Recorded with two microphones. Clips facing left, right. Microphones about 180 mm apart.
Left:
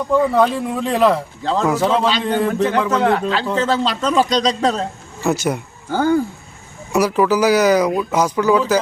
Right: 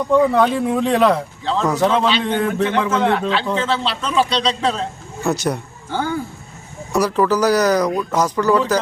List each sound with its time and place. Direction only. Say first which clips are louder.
0.1 s speech: even; centre (ahead or behind)
2.9 s a man's voice: left 1 dB; 40° left (ahead or behind)
5.2 s speech: left 1 dB; centre (ahead or behind)
5.9 s a man's voice: left 6 dB; 45° left (ahead or behind)
6.9 s speech: left 1 dB; 5° left (ahead or behind)